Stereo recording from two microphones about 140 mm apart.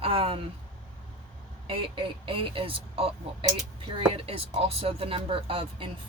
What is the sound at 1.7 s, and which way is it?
Speech, 40° right (ahead or behind).